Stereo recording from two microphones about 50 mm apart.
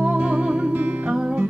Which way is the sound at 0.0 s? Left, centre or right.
Right.